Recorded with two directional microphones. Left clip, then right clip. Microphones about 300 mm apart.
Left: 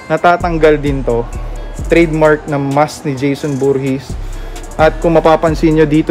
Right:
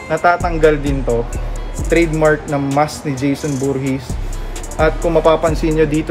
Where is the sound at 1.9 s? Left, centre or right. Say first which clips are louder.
Left 4 dB; left.